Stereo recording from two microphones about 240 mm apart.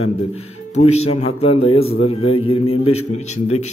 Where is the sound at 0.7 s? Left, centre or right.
Left.